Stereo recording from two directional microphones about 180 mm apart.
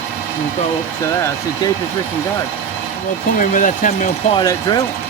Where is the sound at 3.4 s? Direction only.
45° left (ahead or behind).